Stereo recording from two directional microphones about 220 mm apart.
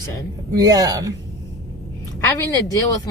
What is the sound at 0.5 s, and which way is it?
Speech, 15° right (ahead or behind).